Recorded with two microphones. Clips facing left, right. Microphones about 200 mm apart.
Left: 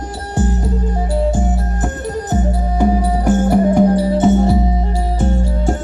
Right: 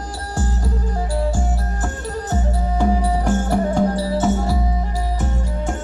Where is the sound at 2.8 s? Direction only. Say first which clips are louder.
Left 4 dB; 15° left (ahead or behind); by 5.7 s 30° left (ahead or behind).